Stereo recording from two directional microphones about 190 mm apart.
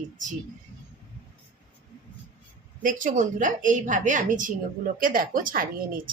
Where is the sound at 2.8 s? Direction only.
45° right (ahead or behind).